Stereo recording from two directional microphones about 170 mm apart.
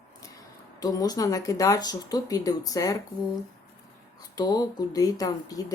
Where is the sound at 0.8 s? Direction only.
20° left (ahead or behind).